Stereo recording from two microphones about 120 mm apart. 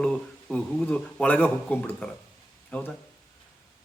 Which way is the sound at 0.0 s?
5° left (ahead or behind).